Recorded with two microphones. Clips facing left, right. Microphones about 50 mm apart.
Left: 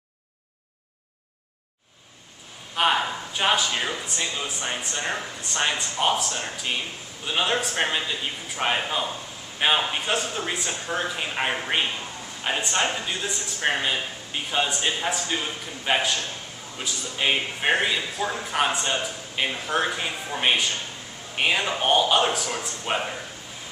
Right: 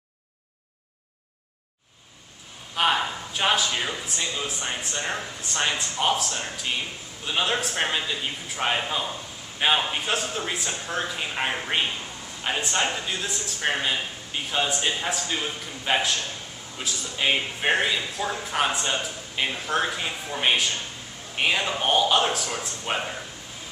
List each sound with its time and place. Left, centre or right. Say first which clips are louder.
2.7 s a man's voice: left 1 dB; centre